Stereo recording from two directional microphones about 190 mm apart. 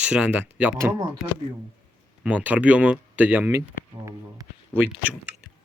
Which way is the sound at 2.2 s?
5° right (ahead or behind).